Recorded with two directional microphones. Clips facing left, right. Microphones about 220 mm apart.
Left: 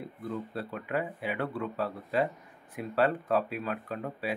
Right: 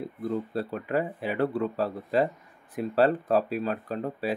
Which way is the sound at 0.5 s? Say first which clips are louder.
Right 5 dB; 40° right (ahead or behind).